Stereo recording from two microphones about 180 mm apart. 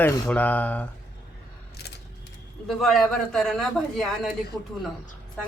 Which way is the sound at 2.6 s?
Centre (ahead or behind).